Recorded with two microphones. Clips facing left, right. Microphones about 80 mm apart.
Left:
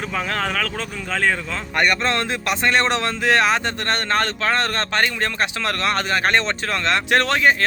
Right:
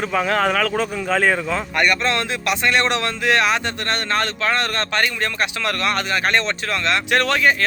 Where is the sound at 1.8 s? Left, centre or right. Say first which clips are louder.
Left 1 dB; left.